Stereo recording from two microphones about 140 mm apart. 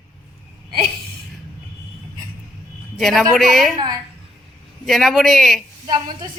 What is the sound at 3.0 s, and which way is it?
Speech, centre (ahead or behind).